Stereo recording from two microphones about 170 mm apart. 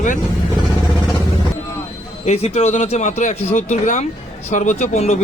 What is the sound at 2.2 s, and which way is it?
Speech, 40° left (ahead or behind).